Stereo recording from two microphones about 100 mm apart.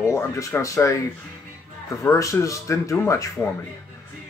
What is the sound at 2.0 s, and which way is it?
Speech, 30° left (ahead or behind).